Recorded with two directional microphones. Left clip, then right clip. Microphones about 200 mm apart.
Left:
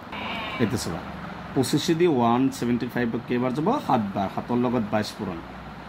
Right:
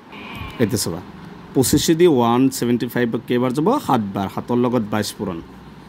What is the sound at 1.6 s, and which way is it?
Speech, 55° right (ahead or behind).